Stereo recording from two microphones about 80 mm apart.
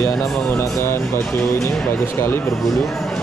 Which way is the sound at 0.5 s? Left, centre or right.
Left.